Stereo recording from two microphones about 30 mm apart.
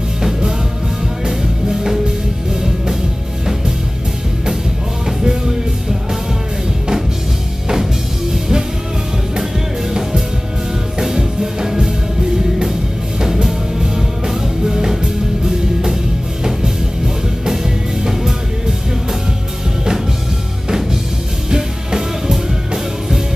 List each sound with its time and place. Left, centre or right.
1.2 s music: centre
5.0 s music: centre
7.6 s music: centre
9.4 s music: centre
13.3 s music: centre
17.5 s music: centre
21.5 s music: centre